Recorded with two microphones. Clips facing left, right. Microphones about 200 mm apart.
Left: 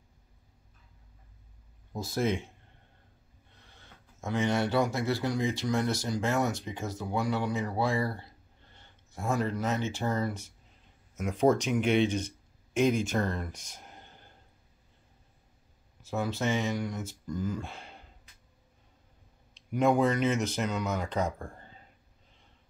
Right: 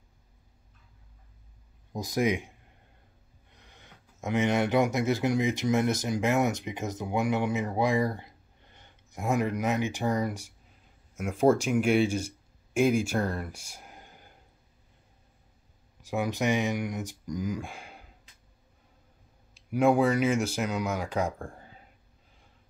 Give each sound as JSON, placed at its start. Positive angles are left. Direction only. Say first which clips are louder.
{"t": 1.9, "sound": "speech", "louder": "right 2 dB", "side_deg": -15}
{"t": 3.6, "sound": "speech", "louder": "right 2 dB", "side_deg": -15}
{"t": 16.0, "sound": "speech", "louder": "right 2 dB", "side_deg": -15}
{"t": 19.7, "sound": "speech", "louder": "right 2 dB", "side_deg": -10}